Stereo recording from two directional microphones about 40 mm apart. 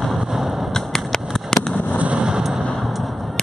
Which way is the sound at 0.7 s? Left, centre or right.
Centre.